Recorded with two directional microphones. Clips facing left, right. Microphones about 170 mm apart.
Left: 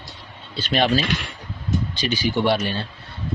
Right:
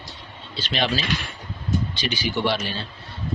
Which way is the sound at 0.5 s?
50° left (ahead or behind).